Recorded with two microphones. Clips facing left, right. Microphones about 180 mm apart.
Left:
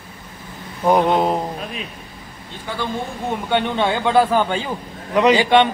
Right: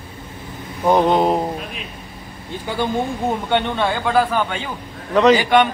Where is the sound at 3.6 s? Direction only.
15° left (ahead or behind).